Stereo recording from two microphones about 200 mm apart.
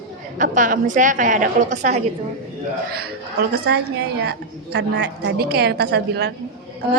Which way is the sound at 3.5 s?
55° right (ahead or behind).